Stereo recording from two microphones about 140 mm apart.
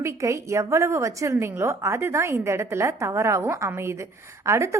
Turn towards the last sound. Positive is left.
turn(degrees=-20)  # may be behind; listen again after turning